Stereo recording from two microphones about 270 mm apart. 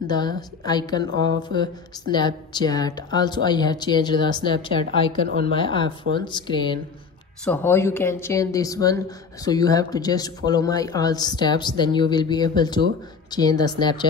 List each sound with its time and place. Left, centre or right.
0.0 s a woman's voice: centre
4.8 s speech: right
5.5 s speech: centre